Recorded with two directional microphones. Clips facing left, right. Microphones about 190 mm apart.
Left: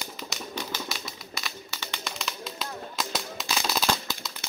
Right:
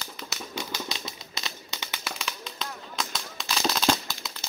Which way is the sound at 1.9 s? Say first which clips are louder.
Left 1 dB; 5° right (ahead or behind).